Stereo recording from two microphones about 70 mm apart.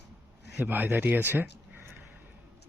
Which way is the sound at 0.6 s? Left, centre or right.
Right.